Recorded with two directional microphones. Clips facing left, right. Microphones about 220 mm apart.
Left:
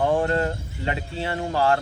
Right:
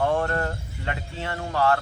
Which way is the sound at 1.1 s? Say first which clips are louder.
Left 4 dB; 35° left (ahead or behind).